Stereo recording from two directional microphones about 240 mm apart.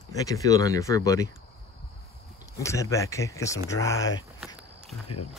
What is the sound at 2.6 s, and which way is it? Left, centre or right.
Speech, centre.